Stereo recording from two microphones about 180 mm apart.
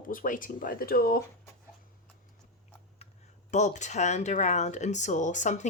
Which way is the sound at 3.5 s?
40° left (ahead or behind).